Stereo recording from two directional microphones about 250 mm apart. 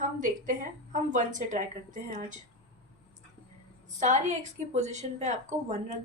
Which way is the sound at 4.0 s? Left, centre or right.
Right.